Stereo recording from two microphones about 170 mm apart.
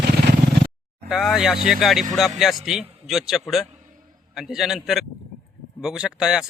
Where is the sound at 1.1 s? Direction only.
Centre (ahead or behind).